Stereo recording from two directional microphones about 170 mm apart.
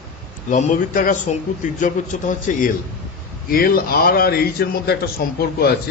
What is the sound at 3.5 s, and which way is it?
A man's voice, 60° left (ahead or behind).